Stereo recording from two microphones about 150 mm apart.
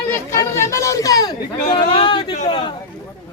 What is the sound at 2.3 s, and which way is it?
Speech, 45° left (ahead or behind).